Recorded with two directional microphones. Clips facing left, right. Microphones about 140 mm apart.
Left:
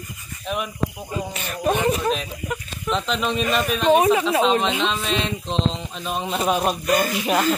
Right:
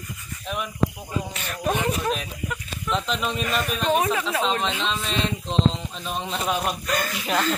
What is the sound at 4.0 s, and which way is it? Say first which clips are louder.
Speech: left 6 dB; 20° left (ahead or behind).